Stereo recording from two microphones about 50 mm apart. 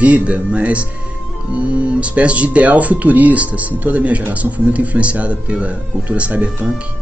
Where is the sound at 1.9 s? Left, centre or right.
Right.